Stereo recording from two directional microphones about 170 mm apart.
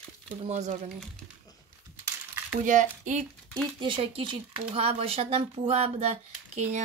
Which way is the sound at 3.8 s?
30° right (ahead or behind).